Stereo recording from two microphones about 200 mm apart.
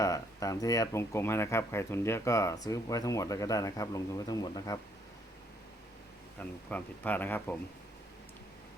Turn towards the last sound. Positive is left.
turn(degrees=10)  # may be behind; listen again after turning